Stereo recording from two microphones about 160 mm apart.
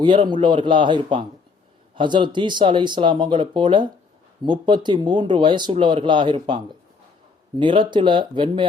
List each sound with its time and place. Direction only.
0.0 s speech: 30° right (ahead or behind)